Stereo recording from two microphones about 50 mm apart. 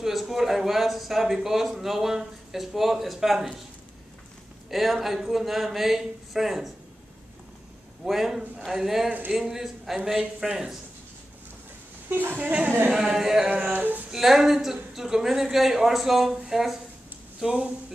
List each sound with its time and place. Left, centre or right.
0.0 s speech: centre
4.6 s speech: centre
8.0 s speech: centre
12.1 s speech: right
12.4 s a woman's voice: right
12.9 s speech: centre
13.7 s speech: right
14.1 s speech: centre
17.4 s a woman's voice: centre